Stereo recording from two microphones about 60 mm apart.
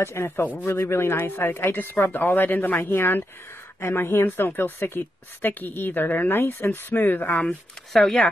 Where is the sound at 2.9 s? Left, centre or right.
Left.